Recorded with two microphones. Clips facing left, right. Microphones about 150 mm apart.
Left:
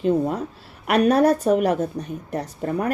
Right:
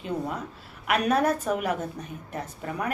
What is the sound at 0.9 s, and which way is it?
Speech, 35° left (ahead or behind).